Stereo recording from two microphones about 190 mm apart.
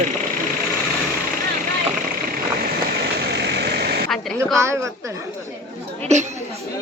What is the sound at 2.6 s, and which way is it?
Vehicle, 60° right (ahead or behind).